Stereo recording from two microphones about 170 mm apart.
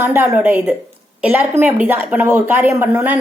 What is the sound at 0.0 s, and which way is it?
A woman's voice, 15° right (ahead or behind).